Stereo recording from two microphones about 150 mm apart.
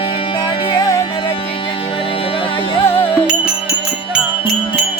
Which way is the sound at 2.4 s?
35° left (ahead or behind).